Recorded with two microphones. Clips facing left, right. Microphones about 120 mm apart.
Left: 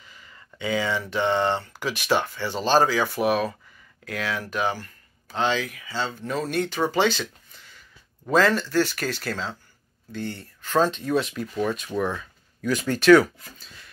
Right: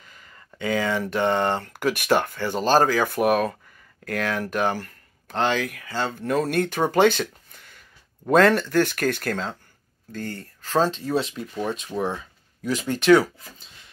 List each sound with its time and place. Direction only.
0.0 s speech: 45° right (ahead or behind); by 13.8 s 25° right (ahead or behind)